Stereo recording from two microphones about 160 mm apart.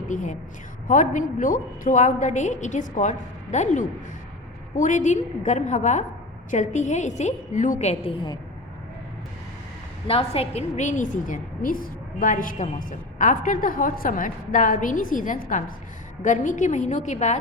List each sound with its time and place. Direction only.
0.1 s a woman's voice: 50° left (ahead or behind)
10.1 s a woman's voice: 35° left (ahead or behind)